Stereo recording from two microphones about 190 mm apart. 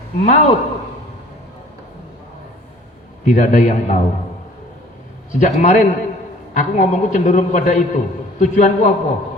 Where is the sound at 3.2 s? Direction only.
40° left (ahead or behind).